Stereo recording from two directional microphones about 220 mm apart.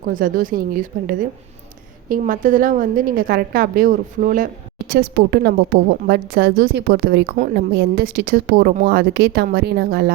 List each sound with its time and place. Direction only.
0.1 s a woman's voice: 40° right (ahead or behind)